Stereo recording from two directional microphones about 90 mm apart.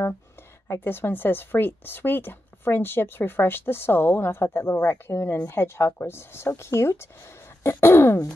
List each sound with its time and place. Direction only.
0.7 s a woman's voice: 25° left (ahead or behind)